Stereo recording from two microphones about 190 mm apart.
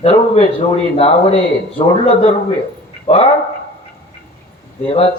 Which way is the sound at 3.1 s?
30° left (ahead or behind).